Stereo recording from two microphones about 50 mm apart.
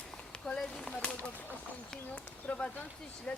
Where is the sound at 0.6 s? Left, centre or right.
Centre.